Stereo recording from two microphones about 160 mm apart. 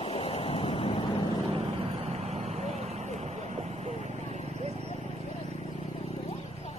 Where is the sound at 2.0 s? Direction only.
40° right (ahead or behind).